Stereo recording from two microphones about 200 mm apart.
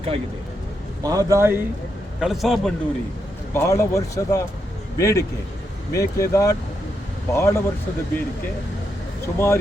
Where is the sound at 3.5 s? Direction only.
15° left (ahead or behind).